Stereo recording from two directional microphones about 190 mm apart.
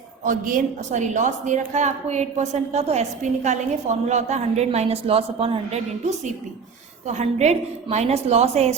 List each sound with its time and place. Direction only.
0.3 s a woman's voice: 45° right (ahead or behind)